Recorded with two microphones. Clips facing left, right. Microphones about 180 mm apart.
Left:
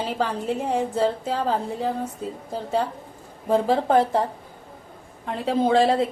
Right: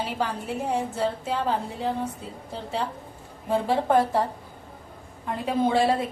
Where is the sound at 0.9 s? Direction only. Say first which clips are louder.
Left 4 dB; 35° left (ahead or behind).